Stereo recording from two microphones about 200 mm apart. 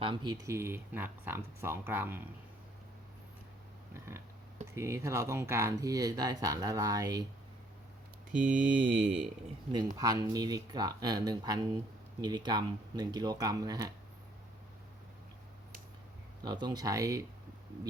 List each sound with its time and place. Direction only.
0.0 s speech: 25° right (ahead or behind)
3.9 s a sound: 10° right (ahead or behind)
4.7 s speech: 15° right (ahead or behind)
8.4 s speech: 5° right (ahead or behind)
9.7 s speech: 20° right (ahead or behind)
16.4 s speech: 20° right (ahead or behind)